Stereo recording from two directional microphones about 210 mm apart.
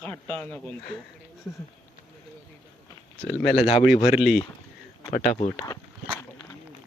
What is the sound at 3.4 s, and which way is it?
Speech, 30° left (ahead or behind).